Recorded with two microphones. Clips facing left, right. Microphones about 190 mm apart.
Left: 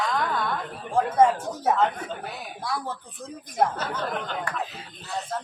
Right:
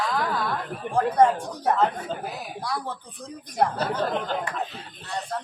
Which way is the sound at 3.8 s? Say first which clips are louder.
Right 4 dB; 30° right (ahead or behind).